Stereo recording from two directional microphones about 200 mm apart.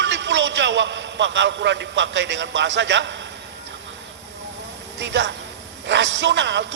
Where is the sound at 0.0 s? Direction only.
65° right (ahead or behind).